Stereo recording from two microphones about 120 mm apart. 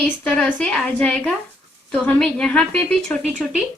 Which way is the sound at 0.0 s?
10° left (ahead or behind).